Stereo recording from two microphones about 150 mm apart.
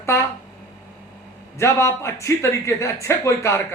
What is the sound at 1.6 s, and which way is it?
A man's voice, 20° left (ahead or behind).